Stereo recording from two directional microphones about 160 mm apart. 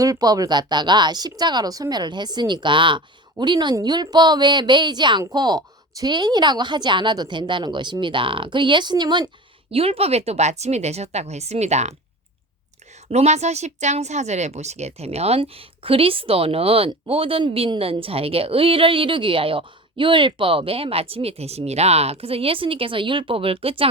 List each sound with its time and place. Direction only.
0.0 s a woman's voice: 25° right (ahead or behind); by 11.9 s 45° right (ahead or behind)
13.1 s speech: 45° right (ahead or behind)